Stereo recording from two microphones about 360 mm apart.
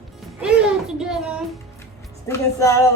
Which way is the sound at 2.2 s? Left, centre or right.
Centre.